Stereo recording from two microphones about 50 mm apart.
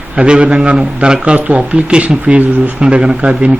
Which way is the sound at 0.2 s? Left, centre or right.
Right.